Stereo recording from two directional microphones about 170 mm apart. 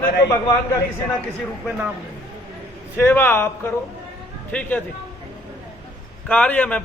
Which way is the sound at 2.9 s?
15° left (ahead or behind).